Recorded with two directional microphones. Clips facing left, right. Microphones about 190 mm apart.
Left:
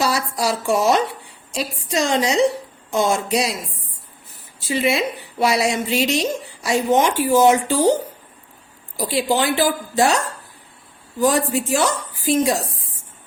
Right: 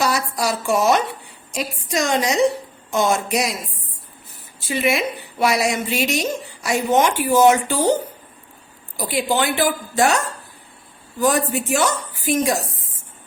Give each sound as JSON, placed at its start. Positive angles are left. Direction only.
{"t": 0.0, "sound": "a sound", "side_deg": 30}
{"t": 0.7, "sound": "a woman's voice", "side_deg": 30}
{"t": 4.7, "sound": "a woman's voice", "side_deg": 30}
{"t": 9.0, "sound": "a woman's voice", "side_deg": 30}
{"t": 11.2, "sound": "a woman's voice", "side_deg": 30}